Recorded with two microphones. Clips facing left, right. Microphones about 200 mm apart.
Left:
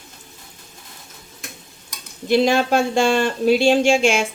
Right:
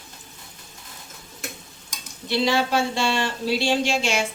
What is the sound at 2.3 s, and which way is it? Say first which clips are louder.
Speech: left 6 dB; 50° left (ahead or behind).